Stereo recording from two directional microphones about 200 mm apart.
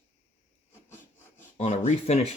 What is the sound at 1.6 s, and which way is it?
Speech, 35° left (ahead or behind).